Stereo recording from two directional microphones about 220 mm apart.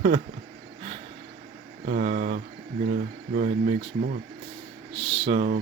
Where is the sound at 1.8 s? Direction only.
35° right (ahead or behind).